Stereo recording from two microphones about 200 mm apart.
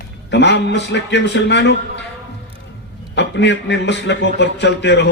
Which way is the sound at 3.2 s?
60° left (ahead or behind).